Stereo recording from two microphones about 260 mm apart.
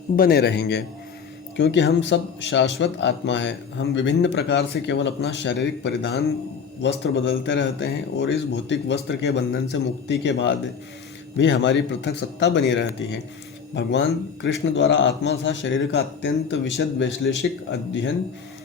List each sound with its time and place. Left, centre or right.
0.2 s a man's voice: left
14.4 s speech: left